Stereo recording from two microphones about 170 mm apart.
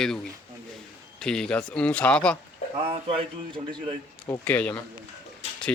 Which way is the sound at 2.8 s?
35° right (ahead or behind).